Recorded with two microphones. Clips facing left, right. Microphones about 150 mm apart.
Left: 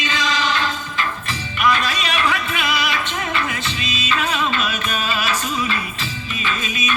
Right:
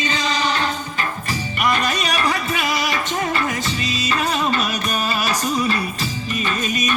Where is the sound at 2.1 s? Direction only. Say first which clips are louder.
Even; 40° right (ahead or behind).